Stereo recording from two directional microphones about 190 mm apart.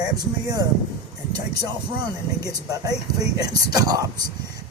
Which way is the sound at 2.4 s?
20° right (ahead or behind).